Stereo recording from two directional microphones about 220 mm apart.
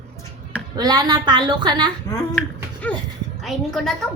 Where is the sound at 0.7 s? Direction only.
15° right (ahead or behind).